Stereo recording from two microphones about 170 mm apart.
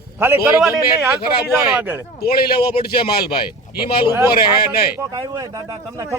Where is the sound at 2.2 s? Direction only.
65° left (ahead or behind).